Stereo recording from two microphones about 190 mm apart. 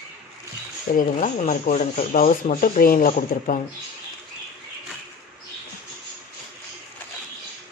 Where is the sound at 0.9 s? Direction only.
45° left (ahead or behind).